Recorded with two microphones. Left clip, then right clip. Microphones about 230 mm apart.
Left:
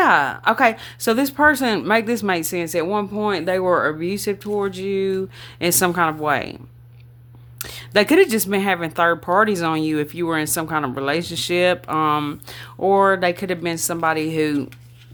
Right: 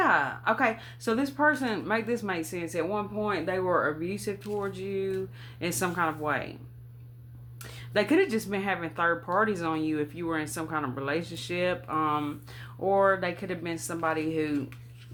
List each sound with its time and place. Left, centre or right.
0.0 s speech: left
7.6 s speech: left